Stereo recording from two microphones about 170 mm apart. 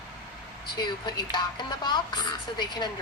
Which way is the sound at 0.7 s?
25° left (ahead or behind).